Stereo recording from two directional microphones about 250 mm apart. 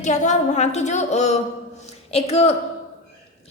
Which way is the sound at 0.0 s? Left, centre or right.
Left.